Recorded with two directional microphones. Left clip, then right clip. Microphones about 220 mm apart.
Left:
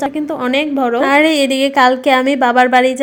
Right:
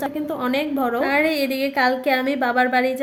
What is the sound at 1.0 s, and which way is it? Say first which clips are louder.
A woman's voice: left 10 dB; 35° left (ahead or behind).